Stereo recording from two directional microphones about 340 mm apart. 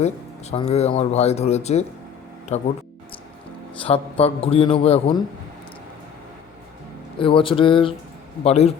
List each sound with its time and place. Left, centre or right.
0.5 s speech: centre
4.2 s a man's voice: centre
7.2 s a man's voice: centre